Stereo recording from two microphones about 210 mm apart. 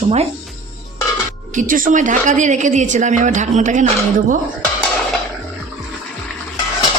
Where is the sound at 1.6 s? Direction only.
40° right (ahead or behind).